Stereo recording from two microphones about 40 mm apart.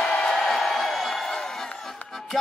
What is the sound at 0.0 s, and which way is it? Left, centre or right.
Music, centre.